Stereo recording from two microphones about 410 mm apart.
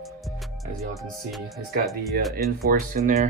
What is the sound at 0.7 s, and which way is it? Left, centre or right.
Music, centre.